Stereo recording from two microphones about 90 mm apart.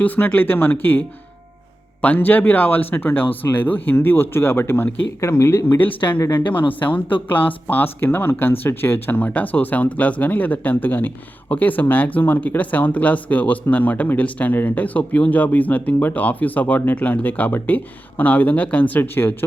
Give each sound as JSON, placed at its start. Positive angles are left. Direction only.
{"t": 0.0, "sound": "speech", "side_deg": 20}
{"t": 6.4, "sound": "speech", "side_deg": 70}
{"t": 6.9, "sound": "speech", "side_deg": 20}